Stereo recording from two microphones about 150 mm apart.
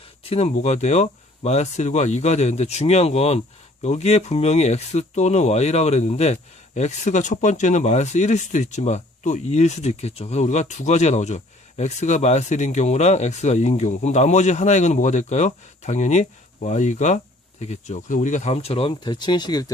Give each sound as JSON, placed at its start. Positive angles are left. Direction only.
{"t": 0.3, "sound": "speech", "side_deg": 45}